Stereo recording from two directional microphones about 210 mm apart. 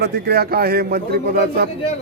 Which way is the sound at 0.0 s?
50° right (ahead or behind).